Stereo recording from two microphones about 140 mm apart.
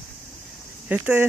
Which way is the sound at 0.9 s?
15° right (ahead or behind).